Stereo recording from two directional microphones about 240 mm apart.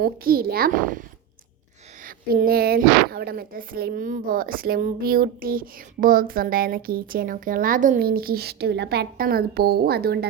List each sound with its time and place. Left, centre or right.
0.0 s speech: right
2.0 s speech: right